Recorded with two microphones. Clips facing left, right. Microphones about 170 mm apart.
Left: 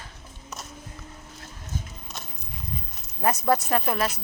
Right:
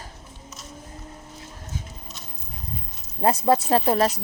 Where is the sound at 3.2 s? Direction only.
30° right (ahead or behind).